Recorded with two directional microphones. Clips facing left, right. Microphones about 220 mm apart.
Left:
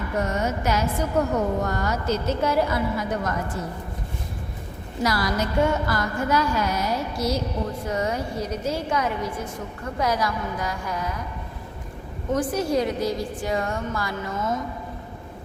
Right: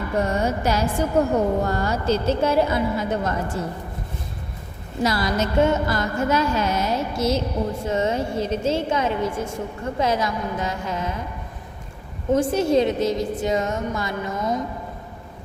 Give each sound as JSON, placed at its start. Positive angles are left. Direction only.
{"t": 0.2, "sound": "a woman's voice", "side_deg": -30}
{"t": 5.0, "sound": "a woman's voice", "side_deg": -25}
{"t": 12.3, "sound": "a woman's voice", "side_deg": -25}